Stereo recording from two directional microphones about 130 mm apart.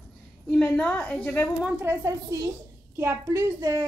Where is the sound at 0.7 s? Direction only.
10° left (ahead or behind).